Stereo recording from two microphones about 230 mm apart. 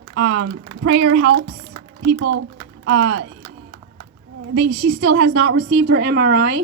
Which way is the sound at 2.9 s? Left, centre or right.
Right.